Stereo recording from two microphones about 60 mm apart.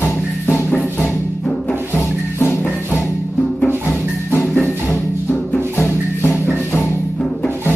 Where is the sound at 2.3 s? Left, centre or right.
Left.